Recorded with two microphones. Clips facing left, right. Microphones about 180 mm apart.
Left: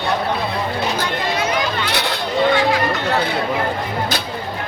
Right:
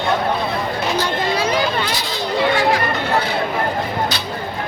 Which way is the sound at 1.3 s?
30° right (ahead or behind).